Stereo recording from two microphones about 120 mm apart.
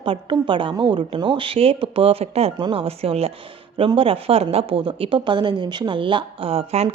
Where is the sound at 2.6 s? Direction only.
40° right (ahead or behind).